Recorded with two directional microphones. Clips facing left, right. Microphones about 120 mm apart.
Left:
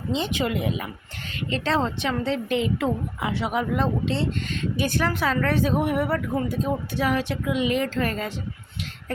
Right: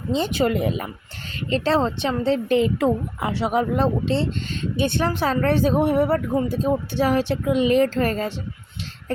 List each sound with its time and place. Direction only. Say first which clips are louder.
0.1 s a woman's voice: right 5 dB; 40° right (ahead or behind)